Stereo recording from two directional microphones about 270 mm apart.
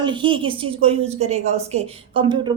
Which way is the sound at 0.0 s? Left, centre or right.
Centre.